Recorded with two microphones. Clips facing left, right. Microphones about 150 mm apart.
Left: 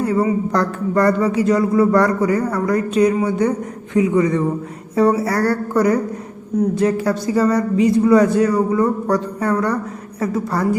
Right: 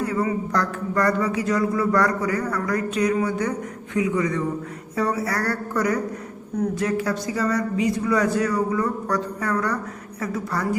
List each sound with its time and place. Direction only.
0.1 s a man's voice: 30° left (ahead or behind)